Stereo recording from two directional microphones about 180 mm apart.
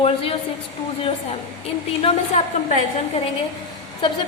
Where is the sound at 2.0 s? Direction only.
35° left (ahead or behind).